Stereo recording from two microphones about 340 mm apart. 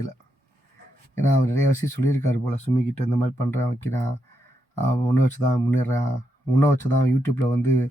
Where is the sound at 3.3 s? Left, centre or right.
Centre.